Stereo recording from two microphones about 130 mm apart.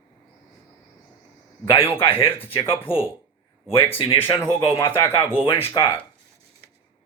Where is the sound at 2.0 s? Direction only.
45° left (ahead or behind).